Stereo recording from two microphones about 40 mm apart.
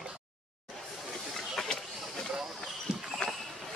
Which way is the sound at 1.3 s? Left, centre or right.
Centre.